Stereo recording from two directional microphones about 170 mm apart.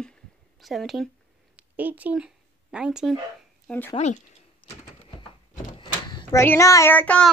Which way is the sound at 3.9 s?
40° left (ahead or behind).